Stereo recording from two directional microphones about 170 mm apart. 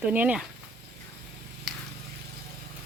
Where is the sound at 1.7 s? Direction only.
Centre (ahead or behind).